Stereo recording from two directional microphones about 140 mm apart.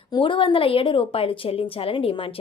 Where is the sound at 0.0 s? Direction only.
35° left (ahead or behind).